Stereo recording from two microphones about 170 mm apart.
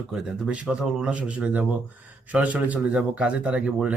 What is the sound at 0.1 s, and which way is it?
Speech, 5° right (ahead or behind).